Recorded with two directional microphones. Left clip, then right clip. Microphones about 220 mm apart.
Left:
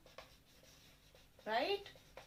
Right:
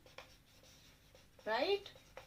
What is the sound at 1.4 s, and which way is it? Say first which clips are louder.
Speech: right 1 dB; 40° right (ahead or behind).